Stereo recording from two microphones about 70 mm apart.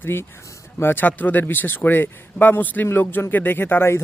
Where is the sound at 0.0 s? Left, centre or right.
Left.